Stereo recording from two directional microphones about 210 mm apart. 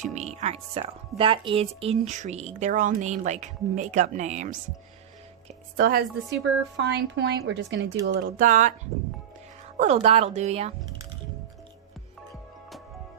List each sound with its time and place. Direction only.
0.0 s a woman's voice: 35° right (ahead or behind)
6.3 s speech: 55° right (ahead or behind)
8.4 s speech: 40° right (ahead or behind)
9.7 s speech: 35° right (ahead or behind)